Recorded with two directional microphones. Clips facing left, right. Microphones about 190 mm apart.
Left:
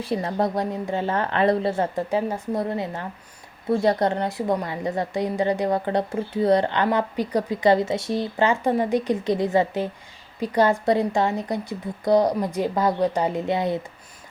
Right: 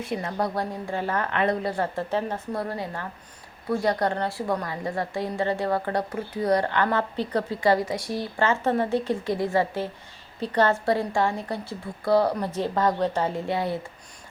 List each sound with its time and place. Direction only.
0.0 s a woman's voice: 30° left (ahead or behind)